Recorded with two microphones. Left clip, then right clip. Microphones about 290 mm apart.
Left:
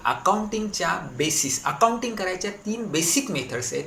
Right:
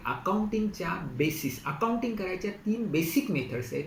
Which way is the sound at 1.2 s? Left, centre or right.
Left.